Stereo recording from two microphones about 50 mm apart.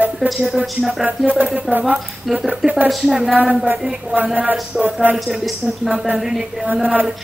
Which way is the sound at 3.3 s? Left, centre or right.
Right.